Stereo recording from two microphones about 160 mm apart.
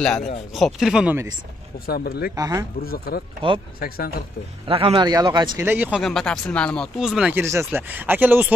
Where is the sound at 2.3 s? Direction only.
20° right (ahead or behind).